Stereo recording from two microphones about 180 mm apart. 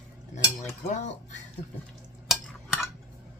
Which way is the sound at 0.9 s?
40° left (ahead or behind).